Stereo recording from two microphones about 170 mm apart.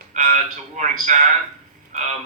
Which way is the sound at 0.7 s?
45° right (ahead or behind).